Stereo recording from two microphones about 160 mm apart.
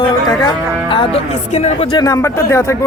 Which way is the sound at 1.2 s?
45° left (ahead or behind).